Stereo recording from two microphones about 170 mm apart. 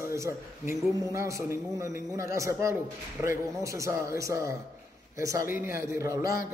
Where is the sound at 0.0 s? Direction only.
15° right (ahead or behind).